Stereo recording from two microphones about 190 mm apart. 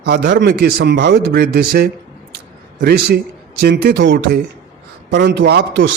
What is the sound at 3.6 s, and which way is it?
A man's voice, 55° right (ahead or behind).